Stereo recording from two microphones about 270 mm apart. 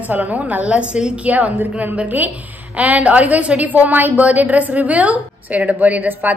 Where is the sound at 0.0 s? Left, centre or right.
Centre.